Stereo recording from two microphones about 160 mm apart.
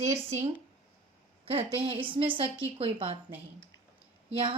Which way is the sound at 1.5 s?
35° right (ahead or behind).